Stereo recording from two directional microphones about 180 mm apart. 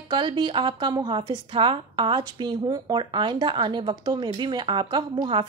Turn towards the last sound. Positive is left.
turn(degrees=-25)  # may be behind; listen again after turning